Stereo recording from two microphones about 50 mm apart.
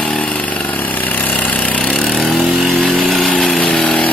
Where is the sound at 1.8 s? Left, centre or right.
Centre.